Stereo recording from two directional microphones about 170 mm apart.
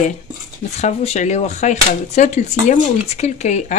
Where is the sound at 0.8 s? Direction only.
40° left (ahead or behind).